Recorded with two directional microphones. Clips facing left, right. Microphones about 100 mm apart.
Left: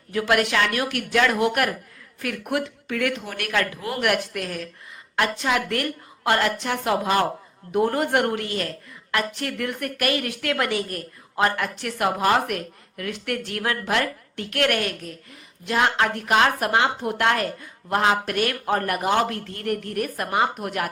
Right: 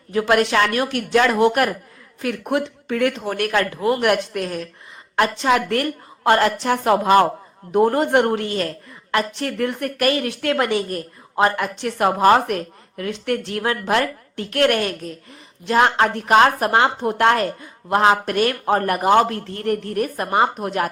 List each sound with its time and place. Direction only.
0.1 s a woman's voice: 30° right (ahead or behind); by 7.3 s 50° right (ahead or behind)
7.7 s a woman's voice: 35° right (ahead or behind)
12.0 s a woman's voice: 40° right (ahead or behind)
17.6 s speech: 25° right (ahead or behind)
18.0 s a woman's voice: 35° right (ahead or behind)